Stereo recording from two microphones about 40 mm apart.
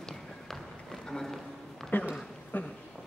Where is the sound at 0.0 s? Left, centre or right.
Centre.